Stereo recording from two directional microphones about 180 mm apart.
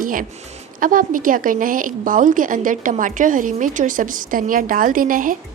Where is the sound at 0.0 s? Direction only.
50° right (ahead or behind).